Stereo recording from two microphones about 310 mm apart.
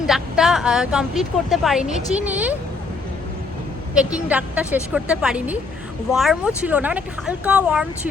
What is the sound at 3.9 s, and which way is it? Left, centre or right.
Speech, centre.